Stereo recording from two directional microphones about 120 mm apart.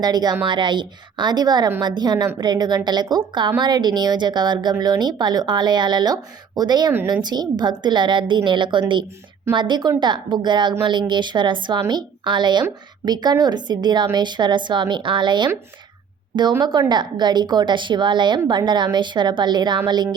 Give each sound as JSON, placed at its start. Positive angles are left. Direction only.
{"t": 0.0, "sound": "a woman's voice", "side_deg": -35}